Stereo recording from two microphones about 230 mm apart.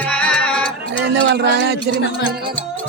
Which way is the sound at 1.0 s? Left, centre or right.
Right.